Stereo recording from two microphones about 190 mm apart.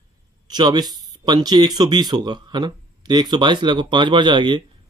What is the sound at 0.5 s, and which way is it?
Speech, 20° right (ahead or behind).